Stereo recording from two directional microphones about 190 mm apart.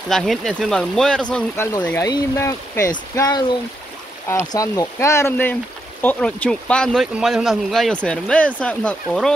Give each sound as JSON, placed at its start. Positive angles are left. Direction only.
{"t": 0.1, "sound": "speech", "side_deg": 0}